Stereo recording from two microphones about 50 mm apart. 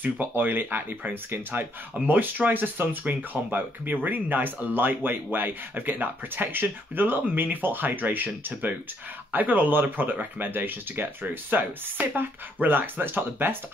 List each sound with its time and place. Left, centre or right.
0.0 s speech: right